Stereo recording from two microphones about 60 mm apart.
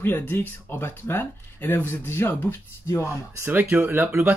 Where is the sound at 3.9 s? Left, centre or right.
Right.